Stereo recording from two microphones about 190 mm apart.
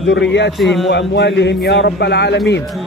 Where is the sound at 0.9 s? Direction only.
60° left (ahead or behind).